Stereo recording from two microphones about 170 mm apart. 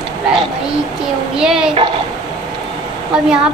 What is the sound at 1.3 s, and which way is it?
Speech, 5° right (ahead or behind).